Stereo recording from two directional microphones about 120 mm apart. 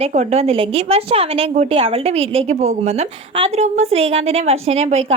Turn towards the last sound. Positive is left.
turn(degrees=-65)  # may be behind; listen again after turning